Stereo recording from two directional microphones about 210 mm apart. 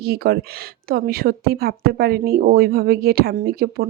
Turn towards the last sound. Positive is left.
turn(degrees=-45)  # may be behind; listen again after turning